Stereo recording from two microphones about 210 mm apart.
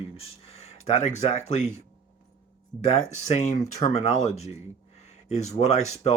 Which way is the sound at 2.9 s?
30° left (ahead or behind).